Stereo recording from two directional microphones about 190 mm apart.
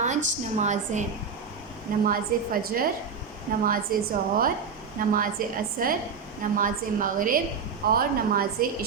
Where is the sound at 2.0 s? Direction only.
50° right (ahead or behind).